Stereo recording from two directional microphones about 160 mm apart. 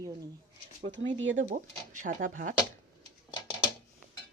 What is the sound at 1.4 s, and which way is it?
Speech, 55° right (ahead or behind).